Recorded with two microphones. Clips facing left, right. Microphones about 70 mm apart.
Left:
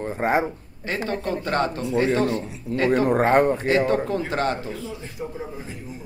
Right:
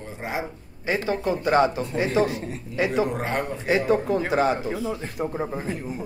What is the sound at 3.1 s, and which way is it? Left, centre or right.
Speech, left.